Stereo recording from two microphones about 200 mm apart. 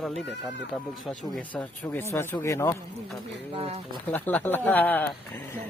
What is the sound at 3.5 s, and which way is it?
Speech, 30° right (ahead or behind).